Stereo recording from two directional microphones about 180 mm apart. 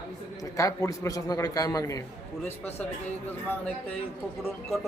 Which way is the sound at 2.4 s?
10° left (ahead or behind).